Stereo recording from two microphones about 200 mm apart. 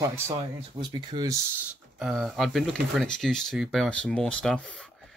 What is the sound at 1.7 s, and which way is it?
Speech, centre (ahead or behind).